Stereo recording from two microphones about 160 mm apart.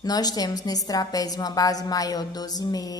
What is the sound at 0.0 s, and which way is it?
A woman's voice, 25° left (ahead or behind).